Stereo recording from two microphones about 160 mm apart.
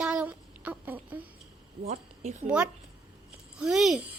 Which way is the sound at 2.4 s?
5° right (ahead or behind).